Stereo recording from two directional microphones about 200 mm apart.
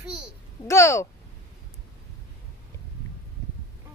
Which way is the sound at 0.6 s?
15° left (ahead or behind).